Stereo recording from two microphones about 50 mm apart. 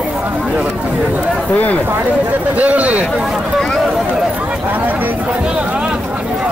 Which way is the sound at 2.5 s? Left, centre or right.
Right.